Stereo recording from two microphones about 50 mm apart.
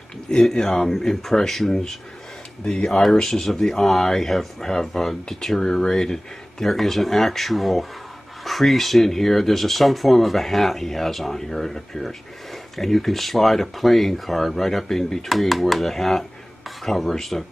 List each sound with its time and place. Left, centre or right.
0.3 s speech: centre
2.6 s speech: centre
3.0 s speech: centre